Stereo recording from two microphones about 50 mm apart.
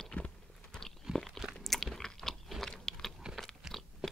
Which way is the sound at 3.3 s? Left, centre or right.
Centre.